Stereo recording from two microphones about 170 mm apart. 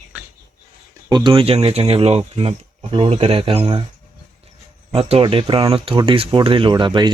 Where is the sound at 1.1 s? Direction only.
30° right (ahead or behind).